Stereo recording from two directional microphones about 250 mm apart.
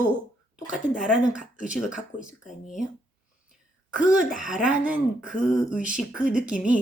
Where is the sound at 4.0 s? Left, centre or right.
Centre.